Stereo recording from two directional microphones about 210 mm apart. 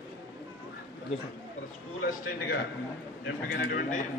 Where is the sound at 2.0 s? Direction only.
45° left (ahead or behind).